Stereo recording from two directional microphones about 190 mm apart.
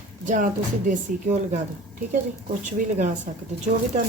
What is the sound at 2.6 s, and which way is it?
Speech, 40° right (ahead or behind).